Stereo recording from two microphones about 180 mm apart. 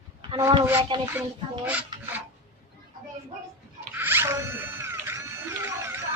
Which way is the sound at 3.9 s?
10° right (ahead or behind).